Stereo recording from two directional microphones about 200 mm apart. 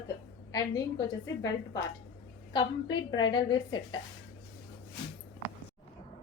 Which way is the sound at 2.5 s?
20° left (ahead or behind).